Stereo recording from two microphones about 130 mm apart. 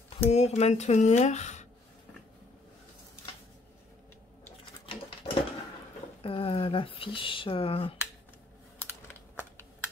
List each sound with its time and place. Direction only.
0.3 s speech: 55° left (ahead or behind)
5.2 s a sound: 55° left (ahead or behind)
6.2 s speech: 45° left (ahead or behind)